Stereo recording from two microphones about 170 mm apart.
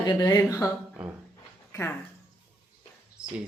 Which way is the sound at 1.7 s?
15° left (ahead or behind).